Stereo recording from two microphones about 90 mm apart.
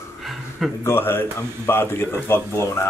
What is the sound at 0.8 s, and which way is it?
A man's voice, 25° left (ahead or behind).